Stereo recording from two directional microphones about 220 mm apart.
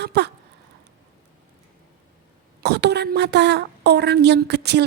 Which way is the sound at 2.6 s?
50° right (ahead or behind).